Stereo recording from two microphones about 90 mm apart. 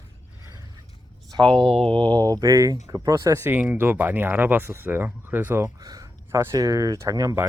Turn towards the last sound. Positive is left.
turn(degrees=-40)  # may be behind; listen again after turning